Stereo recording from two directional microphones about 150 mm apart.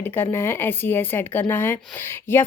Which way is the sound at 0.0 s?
15° left (ahead or behind).